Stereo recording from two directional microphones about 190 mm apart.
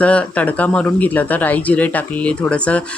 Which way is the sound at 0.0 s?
5° left (ahead or behind).